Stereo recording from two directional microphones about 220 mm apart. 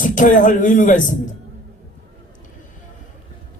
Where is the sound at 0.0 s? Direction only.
35° left (ahead or behind).